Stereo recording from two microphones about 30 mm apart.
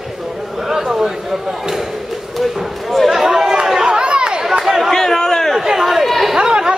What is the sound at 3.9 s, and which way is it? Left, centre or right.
Chatter, right.